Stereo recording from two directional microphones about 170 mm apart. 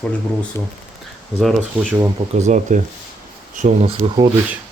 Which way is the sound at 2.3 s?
45° right (ahead or behind).